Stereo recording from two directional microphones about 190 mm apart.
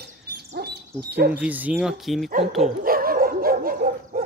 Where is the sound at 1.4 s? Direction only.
5° right (ahead or behind).